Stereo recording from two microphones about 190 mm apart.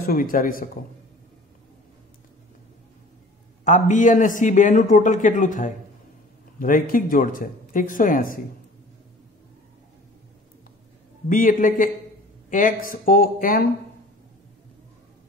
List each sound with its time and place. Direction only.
0.0 s speech: 50° left (ahead or behind)
3.6 s a man's voice: 40° left (ahead or behind)
11.2 s speech: 45° left (ahead or behind)